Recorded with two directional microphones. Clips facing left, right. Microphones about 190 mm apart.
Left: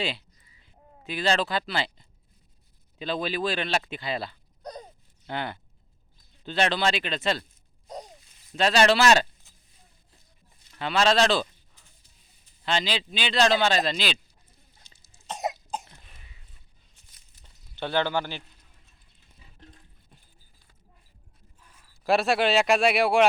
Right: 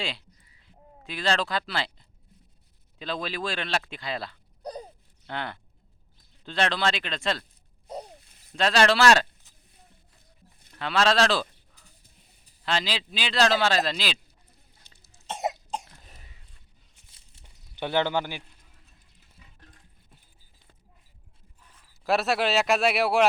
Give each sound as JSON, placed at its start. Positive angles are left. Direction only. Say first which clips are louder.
{"t": 0.0, "sound": "a sound", "louder": "left 3 dB", "side_deg": 0}
{"t": 3.0, "sound": "a man's voice", "louder": "left 3 dB", "side_deg": 0}
{"t": 8.1, "sound": "a sound", "louder": "right 2 dB", "side_deg": -60}
{"t": 8.5, "sound": "a man's voice", "louder": "left 1 dB", "side_deg": 0}
{"t": 10.8, "sound": "a man's voice", "louder": "left 1 dB", "side_deg": 0}
{"t": 12.6, "sound": "a man's voice", "louder": "left 1 dB", "side_deg": 0}
{"t": 14.8, "sound": "cough", "louder": "right 2 dB", "side_deg": -60}
{"t": 15.3, "sound": "cough", "louder": "right 1 dB", "side_deg": 0}
{"t": 16.0, "sound": "throat clearing", "louder": "right 3 dB", "side_deg": -40}
{"t": 17.4, "sound": "a sound", "louder": "right 1 dB", "side_deg": -15}
{"t": 22.0, "sound": "a man's voice", "louder": "left 2 dB", "side_deg": 0}